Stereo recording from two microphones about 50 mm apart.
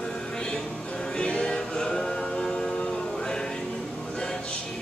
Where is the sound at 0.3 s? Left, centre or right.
Centre.